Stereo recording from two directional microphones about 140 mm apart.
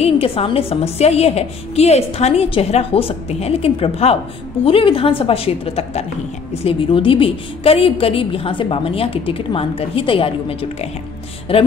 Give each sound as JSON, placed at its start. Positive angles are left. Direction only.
{"t": 0.0, "sound": "a woman's voice", "side_deg": 45}